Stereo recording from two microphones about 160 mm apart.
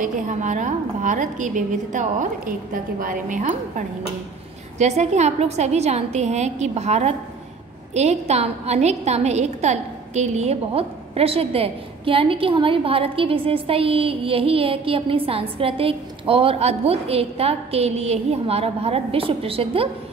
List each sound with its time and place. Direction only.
0.0 s a woman's voice: 50° right (ahead or behind)